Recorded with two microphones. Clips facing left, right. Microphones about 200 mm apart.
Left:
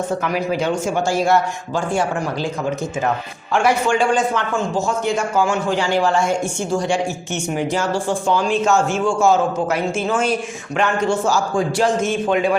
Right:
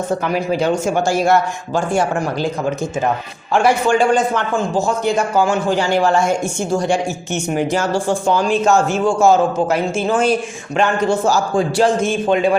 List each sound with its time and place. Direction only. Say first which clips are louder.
0.1 s a man's voice: right 2 dB; 30° right (ahead or behind)
3.5 s a man's voice: right 3 dB; 35° right (ahead or behind)